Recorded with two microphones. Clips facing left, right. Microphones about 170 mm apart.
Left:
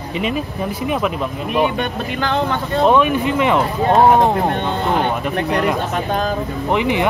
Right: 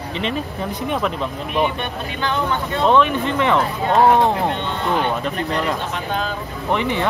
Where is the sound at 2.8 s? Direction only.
10° left (ahead or behind).